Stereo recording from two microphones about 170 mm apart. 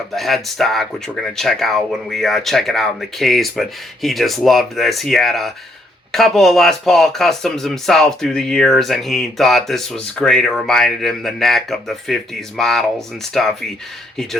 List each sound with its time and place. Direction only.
0.1 s speech: centre (ahead or behind)